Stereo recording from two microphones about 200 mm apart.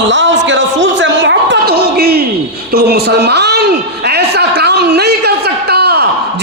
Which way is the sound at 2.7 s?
50° right (ahead or behind).